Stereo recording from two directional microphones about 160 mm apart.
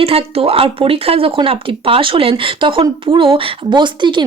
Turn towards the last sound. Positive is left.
turn(degrees=-30)  # may be behind; listen again after turning